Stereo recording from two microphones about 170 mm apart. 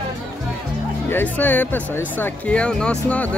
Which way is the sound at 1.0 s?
10° left (ahead or behind).